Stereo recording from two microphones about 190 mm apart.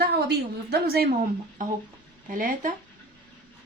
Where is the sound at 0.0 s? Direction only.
55° right (ahead or behind).